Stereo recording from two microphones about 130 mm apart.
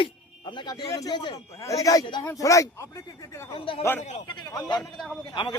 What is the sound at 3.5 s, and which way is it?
Speech, 45° left (ahead or behind).